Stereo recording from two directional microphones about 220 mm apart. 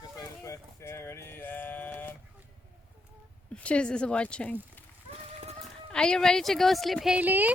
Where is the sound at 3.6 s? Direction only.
5° left (ahead or behind).